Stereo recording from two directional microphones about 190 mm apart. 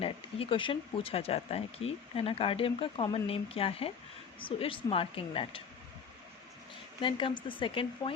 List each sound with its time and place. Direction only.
0.0 s speech: 30° left (ahead or behind)
7.0 s speech: 25° left (ahead or behind)